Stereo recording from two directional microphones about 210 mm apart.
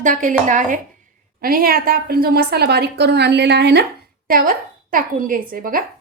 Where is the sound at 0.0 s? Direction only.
35° right (ahead or behind).